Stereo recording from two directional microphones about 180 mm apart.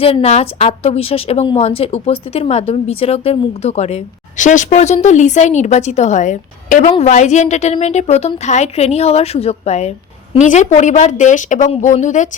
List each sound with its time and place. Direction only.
0.0 s a woman's voice: 35° left (ahead or behind)